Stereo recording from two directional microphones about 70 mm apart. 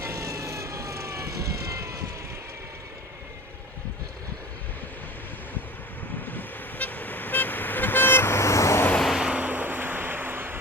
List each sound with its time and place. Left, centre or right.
0.0 s vehicle: right
6.2 s vehicle: left
9.0 s a sound: centre
9.2 s vehicle: centre